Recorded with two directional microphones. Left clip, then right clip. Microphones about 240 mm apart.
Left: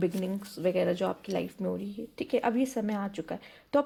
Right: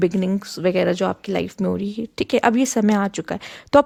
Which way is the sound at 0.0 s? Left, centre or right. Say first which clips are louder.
Right 10 dB; right.